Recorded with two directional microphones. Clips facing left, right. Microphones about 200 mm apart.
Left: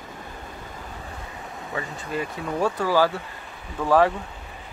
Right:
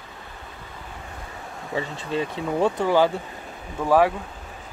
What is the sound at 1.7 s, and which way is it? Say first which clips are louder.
Speech: right 3 dB; 25° right (ahead or behind).